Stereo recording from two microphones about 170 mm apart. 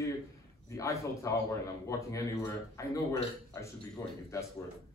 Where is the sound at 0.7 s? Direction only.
20° left (ahead or behind).